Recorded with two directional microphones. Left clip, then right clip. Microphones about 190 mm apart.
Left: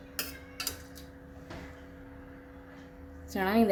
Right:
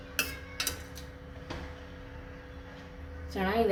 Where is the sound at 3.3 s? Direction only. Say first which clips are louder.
Left 1 dB; 60° left (ahead or behind).